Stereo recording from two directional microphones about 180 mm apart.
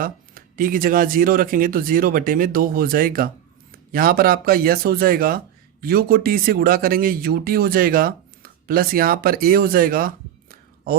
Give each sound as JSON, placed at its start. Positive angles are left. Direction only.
{"t": 0.0, "sound": "speech", "side_deg": -50}